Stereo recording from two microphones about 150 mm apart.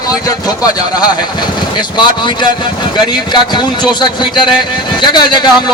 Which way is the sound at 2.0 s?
30° left (ahead or behind).